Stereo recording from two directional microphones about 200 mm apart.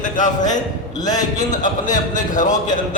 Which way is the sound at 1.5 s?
40° left (ahead or behind).